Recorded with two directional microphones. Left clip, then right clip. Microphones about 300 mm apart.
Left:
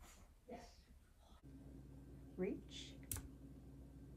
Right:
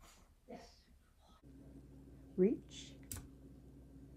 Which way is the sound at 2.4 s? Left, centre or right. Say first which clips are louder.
Right 11 dB; right.